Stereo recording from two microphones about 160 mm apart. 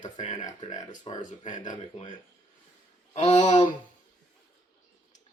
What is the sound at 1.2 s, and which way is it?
Speech, 50° left (ahead or behind).